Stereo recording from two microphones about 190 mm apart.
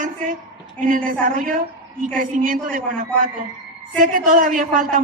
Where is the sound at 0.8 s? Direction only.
45° right (ahead or behind).